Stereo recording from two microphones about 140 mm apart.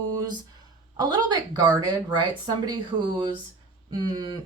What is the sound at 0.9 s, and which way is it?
A woman's voice, 30° right (ahead or behind).